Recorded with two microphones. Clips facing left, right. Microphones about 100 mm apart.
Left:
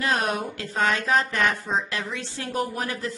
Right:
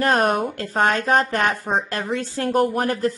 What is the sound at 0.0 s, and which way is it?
A woman's voice, 50° right (ahead or behind).